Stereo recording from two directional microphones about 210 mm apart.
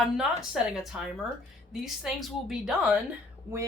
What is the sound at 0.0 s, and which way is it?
Speech, centre (ahead or behind).